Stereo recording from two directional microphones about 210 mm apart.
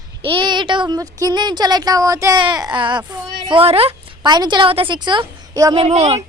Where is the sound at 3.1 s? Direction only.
25° right (ahead or behind).